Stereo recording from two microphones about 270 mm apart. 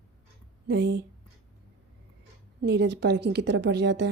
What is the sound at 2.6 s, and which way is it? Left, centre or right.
A woman's voice, right.